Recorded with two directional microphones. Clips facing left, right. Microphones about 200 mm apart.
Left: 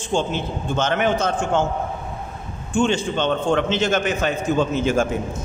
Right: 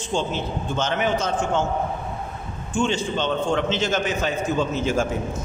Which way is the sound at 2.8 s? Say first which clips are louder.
Left 3 dB; 55° left (ahead or behind).